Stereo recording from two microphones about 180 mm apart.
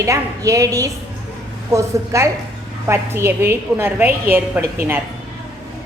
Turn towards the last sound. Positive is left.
turn(degrees=-10)  # may be behind; listen again after turning